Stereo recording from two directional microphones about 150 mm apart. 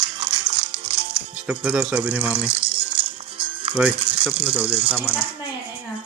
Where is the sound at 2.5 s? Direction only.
35° right (ahead or behind).